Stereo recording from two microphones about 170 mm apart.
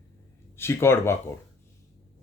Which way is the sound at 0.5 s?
15° left (ahead or behind).